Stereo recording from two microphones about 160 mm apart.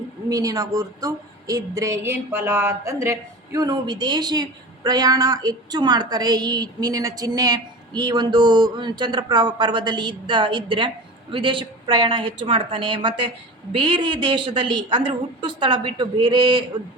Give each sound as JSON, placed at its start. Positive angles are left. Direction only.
{"t": 0.3, "sound": "a woman's voice", "side_deg": -20}